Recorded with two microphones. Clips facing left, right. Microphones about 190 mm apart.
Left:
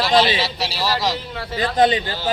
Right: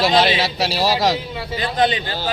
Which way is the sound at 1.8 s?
35° left (ahead or behind).